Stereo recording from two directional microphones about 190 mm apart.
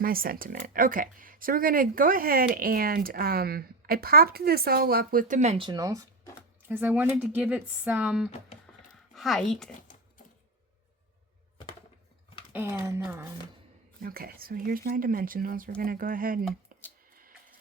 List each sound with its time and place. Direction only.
0.0 s speech: 50° right (ahead or behind)
5.6 s a woman's voice: 20° right (ahead or behind); by 9.7 s centre (ahead or behind)
12.9 s speech: 15° right (ahead or behind)
14.0 s speech: 50° right (ahead or behind)